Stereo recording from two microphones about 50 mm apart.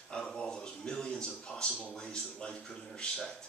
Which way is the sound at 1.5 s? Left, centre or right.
Left.